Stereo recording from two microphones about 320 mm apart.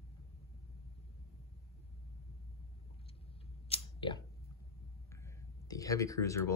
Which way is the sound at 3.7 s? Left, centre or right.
Centre.